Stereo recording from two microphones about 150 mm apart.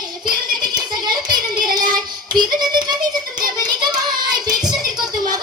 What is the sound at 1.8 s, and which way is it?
Music, 30° right (ahead or behind).